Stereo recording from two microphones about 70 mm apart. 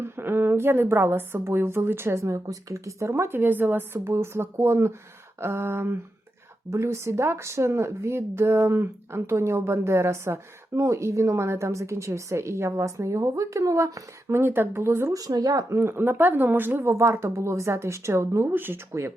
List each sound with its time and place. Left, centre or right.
0.0 s speech: right
15.1 s speech: right
15.7 s speech: right